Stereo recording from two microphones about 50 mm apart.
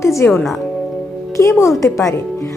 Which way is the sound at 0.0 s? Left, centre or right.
Left.